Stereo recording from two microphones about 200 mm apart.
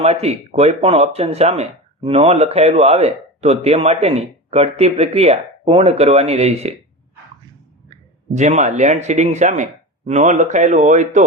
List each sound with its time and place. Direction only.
0.0 s speech: 30° right (ahead or behind)
7.9 s speech: 35° right (ahead or behind)